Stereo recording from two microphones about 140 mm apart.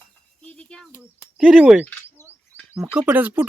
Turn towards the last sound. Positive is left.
turn(degrees=-10)  # may be behind; listen again after turning